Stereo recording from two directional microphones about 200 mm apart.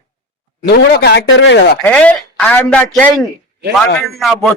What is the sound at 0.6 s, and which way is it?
Speech, 55° left (ahead or behind).